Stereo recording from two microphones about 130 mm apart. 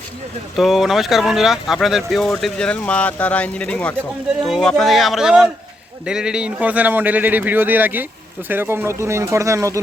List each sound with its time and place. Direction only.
0.5 s speech: centre (ahead or behind); by 9.8 s 25° right (ahead or behind)